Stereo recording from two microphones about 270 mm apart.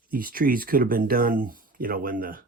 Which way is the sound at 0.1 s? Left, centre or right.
Right.